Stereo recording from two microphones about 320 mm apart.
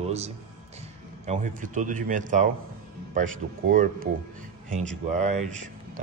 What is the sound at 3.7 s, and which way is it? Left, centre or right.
Speech, right.